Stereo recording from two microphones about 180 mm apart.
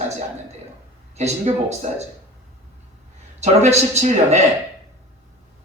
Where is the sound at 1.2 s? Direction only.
40° right (ahead or behind).